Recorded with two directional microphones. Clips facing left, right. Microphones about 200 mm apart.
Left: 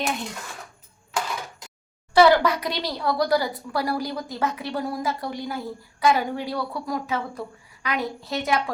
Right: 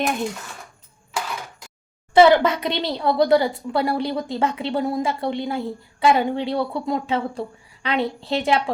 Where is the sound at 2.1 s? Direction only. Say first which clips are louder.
Right 3 dB; 20° right (ahead or behind).